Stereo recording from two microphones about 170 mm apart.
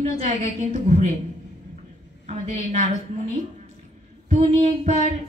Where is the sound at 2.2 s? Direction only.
40° right (ahead or behind).